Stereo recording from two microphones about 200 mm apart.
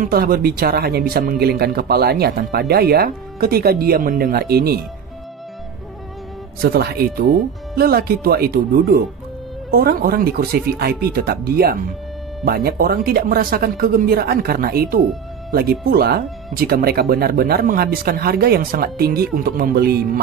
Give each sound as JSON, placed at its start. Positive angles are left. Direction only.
{"t": 0.0, "sound": "speech", "side_deg": -50}
{"t": 6.6, "sound": "speech", "side_deg": -50}